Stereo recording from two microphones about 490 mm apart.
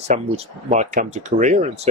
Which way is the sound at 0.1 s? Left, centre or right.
Centre.